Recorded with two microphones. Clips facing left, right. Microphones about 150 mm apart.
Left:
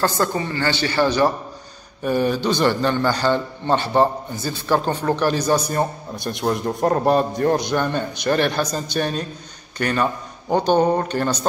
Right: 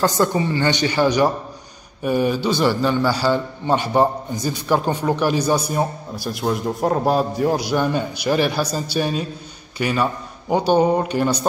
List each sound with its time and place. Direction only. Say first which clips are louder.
0.0 s a man's voice: right 3 dB; 15° right (ahead or behind)